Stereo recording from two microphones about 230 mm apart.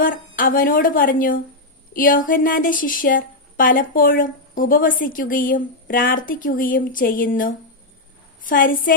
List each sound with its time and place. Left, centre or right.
0.0 s a woman's voice: left